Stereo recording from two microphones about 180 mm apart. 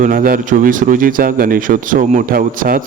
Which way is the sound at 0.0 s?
50° right (ahead or behind).